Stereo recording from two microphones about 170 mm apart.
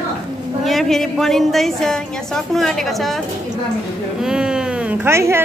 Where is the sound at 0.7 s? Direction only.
Centre (ahead or behind).